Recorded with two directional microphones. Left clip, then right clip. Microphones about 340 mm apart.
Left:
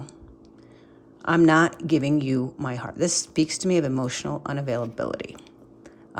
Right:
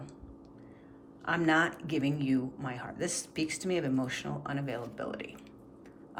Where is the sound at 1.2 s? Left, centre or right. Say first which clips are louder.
Left 9 dB; centre.